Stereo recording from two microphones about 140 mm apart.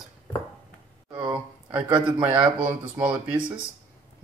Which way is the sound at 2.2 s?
10° right (ahead or behind).